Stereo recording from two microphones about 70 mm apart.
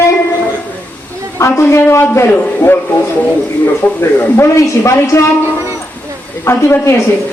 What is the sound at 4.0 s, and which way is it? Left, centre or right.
Speech, left.